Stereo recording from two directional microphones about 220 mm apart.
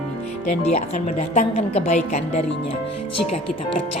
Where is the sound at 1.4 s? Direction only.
30° left (ahead or behind).